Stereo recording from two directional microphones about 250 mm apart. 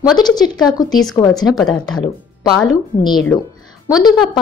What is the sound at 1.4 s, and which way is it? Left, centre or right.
Speech, centre.